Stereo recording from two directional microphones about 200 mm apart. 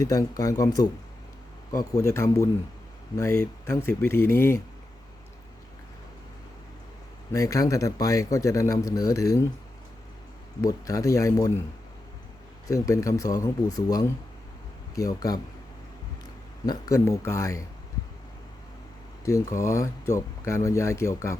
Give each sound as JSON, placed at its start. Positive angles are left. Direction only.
{"t": 0.0, "sound": "speech", "side_deg": 15}
{"t": 7.3, "sound": "speech", "side_deg": 15}
{"t": 10.6, "sound": "speech", "side_deg": 15}
{"t": 12.6, "sound": "speech", "side_deg": 15}
{"t": 16.6, "sound": "speech", "side_deg": 15}
{"t": 19.2, "sound": "speech", "side_deg": 15}